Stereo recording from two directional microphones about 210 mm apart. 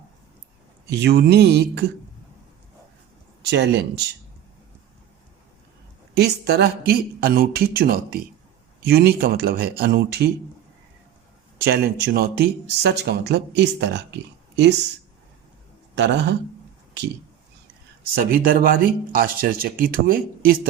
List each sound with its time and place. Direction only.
0.9 s speech: 50° right (ahead or behind)
3.4 s speech: 55° right (ahead or behind)
6.1 s speech: 50° right (ahead or behind)
11.6 s speech: 45° right (ahead or behind)
16.0 s a man's voice: 55° right (ahead or behind)
18.1 s speech: 45° right (ahead or behind)